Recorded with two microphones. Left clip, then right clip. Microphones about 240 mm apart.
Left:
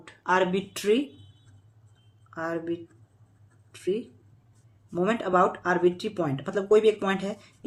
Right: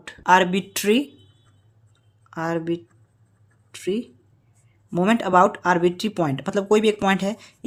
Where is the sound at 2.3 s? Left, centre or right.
Right.